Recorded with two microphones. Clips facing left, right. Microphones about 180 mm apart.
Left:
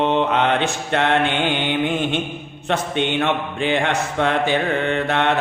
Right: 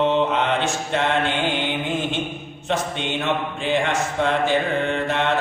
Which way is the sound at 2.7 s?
60° left (ahead or behind).